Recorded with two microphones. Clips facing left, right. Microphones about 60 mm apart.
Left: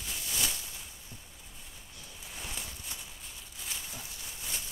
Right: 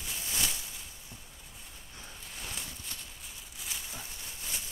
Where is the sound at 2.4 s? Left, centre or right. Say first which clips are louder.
Even; centre.